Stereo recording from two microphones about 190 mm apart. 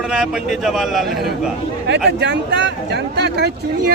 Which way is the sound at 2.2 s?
65° right (ahead or behind).